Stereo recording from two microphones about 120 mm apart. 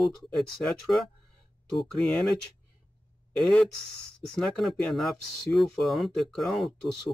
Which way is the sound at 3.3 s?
5° left (ahead or behind).